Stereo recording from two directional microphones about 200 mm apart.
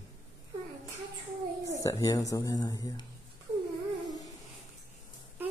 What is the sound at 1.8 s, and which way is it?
Speech, 15° left (ahead or behind).